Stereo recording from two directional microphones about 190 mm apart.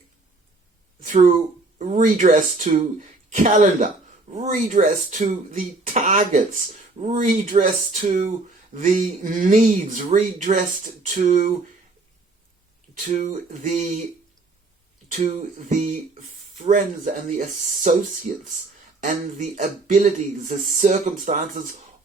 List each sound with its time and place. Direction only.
1.0 s speech: 40° right (ahead or behind)
12.9 s speech: 40° right (ahead or behind)
15.1 s speech: 40° right (ahead or behind)